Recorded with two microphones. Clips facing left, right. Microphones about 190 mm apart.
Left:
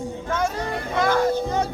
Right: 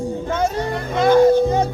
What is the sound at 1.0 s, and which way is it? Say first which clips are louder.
Speech: right 9 dB; 25° right (ahead or behind).